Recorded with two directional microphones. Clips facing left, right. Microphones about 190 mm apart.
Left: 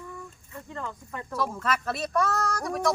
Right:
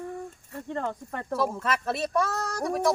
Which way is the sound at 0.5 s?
60° right (ahead or behind).